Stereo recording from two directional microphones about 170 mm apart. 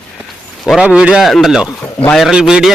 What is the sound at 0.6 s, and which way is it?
Speech, 5° right (ahead or behind).